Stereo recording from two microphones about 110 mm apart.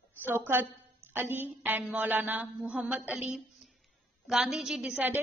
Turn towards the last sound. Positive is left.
turn(degrees=-15)  # may be behind; listen again after turning